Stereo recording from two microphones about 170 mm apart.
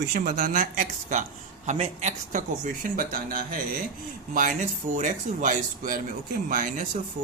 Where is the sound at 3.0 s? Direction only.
60° right (ahead or behind).